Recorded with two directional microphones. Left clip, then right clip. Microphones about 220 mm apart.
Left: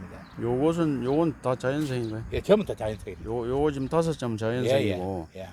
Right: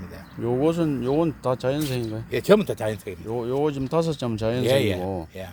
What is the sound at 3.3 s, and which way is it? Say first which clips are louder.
Speech: right 2 dB; 5° left (ahead or behind).